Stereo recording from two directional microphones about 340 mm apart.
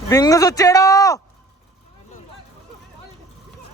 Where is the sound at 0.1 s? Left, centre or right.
Centre.